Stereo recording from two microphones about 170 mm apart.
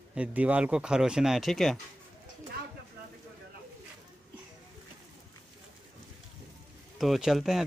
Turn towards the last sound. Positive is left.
turn(degrees=0)  # may be behind; listen again after turning